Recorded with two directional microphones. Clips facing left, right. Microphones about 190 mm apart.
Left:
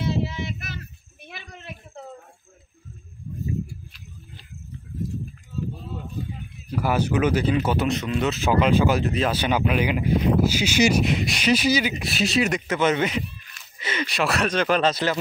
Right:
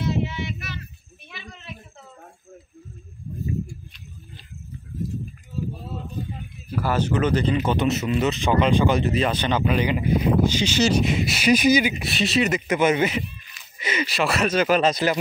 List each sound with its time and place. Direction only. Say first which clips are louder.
0.0 s child singing: right 1 dB; 35° left (ahead or behind)
1.2 s a sound: left 1 dB; 55° left (ahead or behind)
6.7 s speech: even; 10° left (ahead or behind)
11.1 s speech: right 2 dB; 5° right (ahead or behind)
11.5 s speech: right 4 dB; 15° right (ahead or behind)
12.0 s speech: even; centre (ahead or behind)
12.6 s speech: right 2 dB; 10° right (ahead or behind)